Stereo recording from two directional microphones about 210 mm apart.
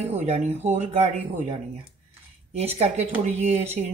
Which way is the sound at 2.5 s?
30° right (ahead or behind).